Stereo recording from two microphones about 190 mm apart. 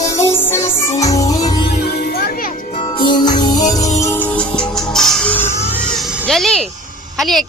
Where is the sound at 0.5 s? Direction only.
15° left (ahead or behind).